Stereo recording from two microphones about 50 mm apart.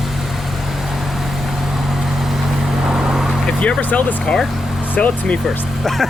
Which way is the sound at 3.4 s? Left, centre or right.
Centre.